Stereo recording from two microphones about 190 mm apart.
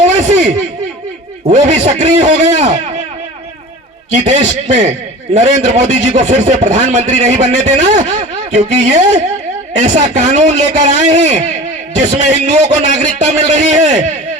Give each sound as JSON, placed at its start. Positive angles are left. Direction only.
{"t": 0.0, "sound": "a sound", "side_deg": -35}
{"t": 1.5, "sound": "a man's voice", "side_deg": -35}
{"t": 4.2, "sound": "a man's voice", "side_deg": -40}